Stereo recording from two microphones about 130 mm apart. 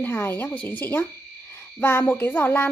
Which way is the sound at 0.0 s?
15° left (ahead or behind).